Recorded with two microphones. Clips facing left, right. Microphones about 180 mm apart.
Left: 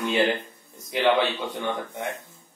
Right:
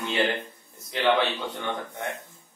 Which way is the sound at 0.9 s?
15° left (ahead or behind).